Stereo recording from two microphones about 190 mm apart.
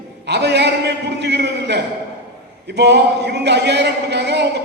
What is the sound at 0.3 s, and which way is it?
Speech, 65° right (ahead or behind).